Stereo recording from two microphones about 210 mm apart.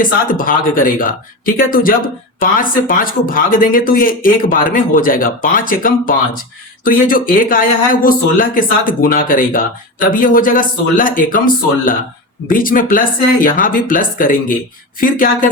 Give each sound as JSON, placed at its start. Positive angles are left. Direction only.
{"t": 0.0, "sound": "speech", "side_deg": 40}